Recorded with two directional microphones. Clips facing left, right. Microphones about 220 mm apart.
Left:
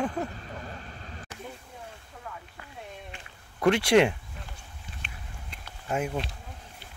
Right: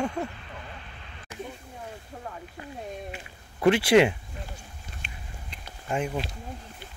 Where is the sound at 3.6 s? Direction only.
5° right (ahead or behind).